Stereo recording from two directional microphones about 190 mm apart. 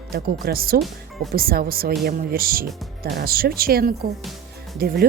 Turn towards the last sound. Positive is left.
turn(degrees=-55)  # may be behind; listen again after turning